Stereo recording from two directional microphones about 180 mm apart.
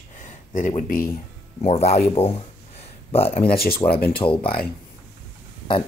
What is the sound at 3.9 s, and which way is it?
Speech, 60° left (ahead or behind).